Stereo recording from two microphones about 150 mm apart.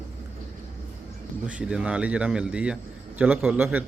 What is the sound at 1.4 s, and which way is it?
A man's voice, 5° right (ahead or behind).